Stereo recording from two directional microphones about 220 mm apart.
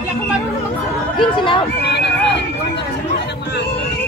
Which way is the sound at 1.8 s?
50° left (ahead or behind).